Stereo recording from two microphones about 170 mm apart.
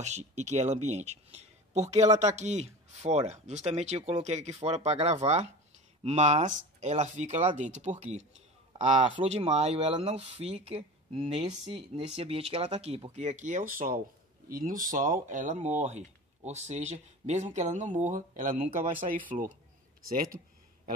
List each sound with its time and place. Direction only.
0.0 s speech: 40° right (ahead or behind)
11.6 s speech: 30° right (ahead or behind); by 19.5 s 50° right (ahead or behind)